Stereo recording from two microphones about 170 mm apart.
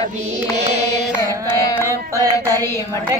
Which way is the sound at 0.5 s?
40° right (ahead or behind).